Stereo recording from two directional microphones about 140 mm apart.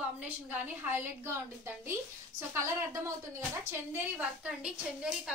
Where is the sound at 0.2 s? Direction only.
15° right (ahead or behind).